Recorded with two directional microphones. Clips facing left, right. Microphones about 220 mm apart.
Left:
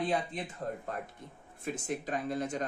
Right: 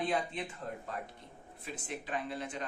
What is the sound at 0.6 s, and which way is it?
Speech, 45° left (ahead or behind).